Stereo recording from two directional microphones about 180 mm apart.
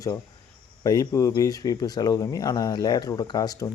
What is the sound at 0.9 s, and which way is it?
Speech, 20° left (ahead or behind).